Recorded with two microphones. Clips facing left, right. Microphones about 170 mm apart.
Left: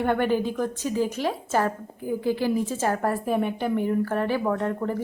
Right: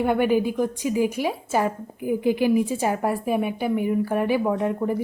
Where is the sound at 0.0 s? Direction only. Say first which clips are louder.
Right 3 dB; 10° right (ahead or behind).